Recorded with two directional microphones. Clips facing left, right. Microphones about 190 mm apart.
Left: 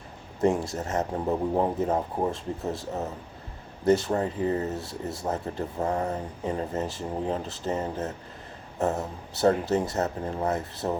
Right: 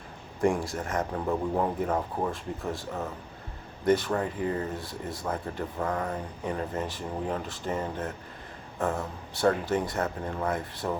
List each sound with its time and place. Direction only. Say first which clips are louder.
0.4 s speech: left 2 dB; 25° left (ahead or behind)